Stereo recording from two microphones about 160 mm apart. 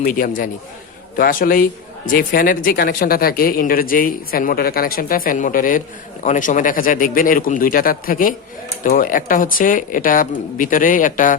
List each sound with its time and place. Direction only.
0.0 s speech: 60° left (ahead or behind)